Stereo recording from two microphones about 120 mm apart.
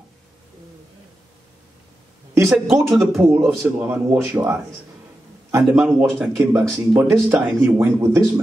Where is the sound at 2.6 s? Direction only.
20° right (ahead or behind).